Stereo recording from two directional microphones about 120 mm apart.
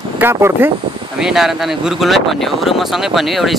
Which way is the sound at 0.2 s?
20° right (ahead or behind).